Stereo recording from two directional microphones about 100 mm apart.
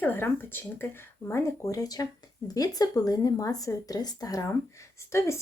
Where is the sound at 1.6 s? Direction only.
35° left (ahead or behind).